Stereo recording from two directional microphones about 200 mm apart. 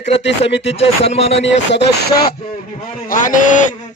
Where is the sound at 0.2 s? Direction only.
60° left (ahead or behind).